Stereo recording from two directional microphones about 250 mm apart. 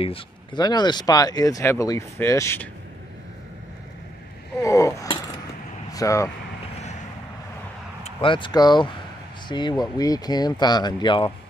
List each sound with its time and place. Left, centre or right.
0.0 s speech: left
4.6 s speech: centre
8.0 s speech: left